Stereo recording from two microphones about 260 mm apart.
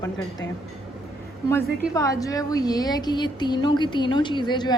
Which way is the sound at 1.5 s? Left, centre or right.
Centre.